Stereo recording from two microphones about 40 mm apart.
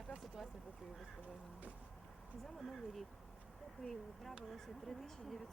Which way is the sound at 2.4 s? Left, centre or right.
Centre.